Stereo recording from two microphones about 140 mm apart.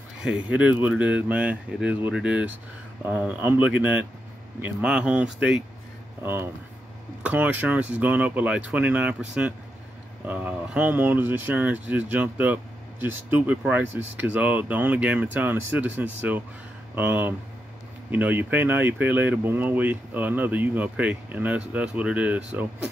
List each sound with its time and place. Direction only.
0.2 s speech: 5° right (ahead or behind)
6.2 s speech: 15° right (ahead or behind)